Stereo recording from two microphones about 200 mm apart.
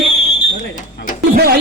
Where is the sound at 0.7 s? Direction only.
40° left (ahead or behind).